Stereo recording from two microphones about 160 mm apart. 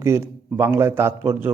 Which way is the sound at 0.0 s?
15° right (ahead or behind).